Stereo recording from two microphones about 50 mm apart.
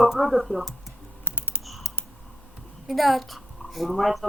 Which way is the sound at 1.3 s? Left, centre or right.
Left.